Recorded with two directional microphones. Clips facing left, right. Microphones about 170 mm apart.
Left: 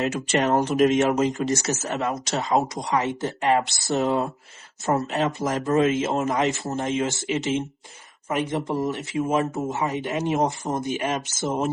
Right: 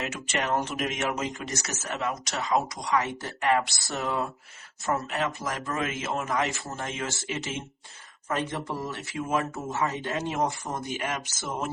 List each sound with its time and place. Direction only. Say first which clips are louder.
0.0 s speech: left 8 dB; 35° left (ahead or behind)